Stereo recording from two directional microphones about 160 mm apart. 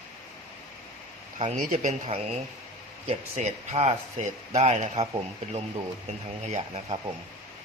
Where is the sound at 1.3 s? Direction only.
40° right (ahead or behind).